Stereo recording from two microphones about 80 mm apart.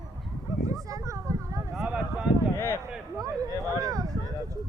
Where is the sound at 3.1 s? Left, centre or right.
Right.